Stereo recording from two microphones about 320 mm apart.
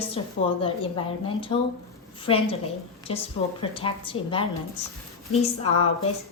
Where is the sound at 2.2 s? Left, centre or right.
Centre.